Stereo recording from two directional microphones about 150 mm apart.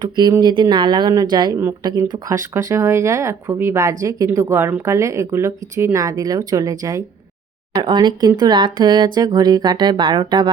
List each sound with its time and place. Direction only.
0.0 s speech: 25° right (ahead or behind)